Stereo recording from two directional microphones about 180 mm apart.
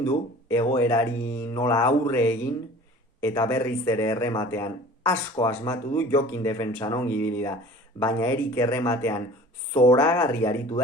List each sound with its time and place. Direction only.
0.0 s speech: 15° left (ahead or behind)